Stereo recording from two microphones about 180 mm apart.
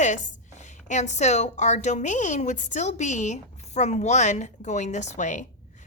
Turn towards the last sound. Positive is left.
turn(degrees=40)  # may be behind; listen again after turning